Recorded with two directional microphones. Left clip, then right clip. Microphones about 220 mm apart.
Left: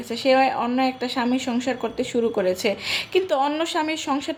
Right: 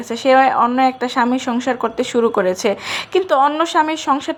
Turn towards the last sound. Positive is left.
turn(degrees=-10)  # may be behind; listen again after turning